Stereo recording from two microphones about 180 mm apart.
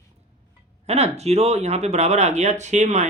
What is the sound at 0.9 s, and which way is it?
Speech, 35° right (ahead or behind).